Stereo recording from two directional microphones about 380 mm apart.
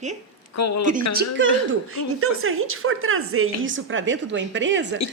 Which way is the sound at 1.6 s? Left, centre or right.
Right.